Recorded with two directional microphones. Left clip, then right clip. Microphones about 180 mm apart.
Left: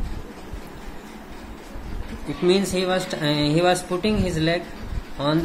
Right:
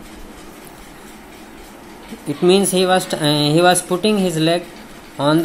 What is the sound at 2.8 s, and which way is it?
Speech, 25° right (ahead or behind).